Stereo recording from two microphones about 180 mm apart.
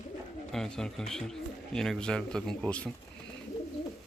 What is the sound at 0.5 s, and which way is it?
A man's voice, 5° left (ahead or behind).